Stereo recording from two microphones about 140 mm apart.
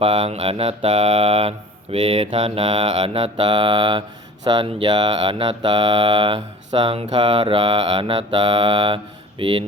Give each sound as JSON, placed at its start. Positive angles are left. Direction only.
{"t": 0.0, "sound": "mantra", "side_deg": -40}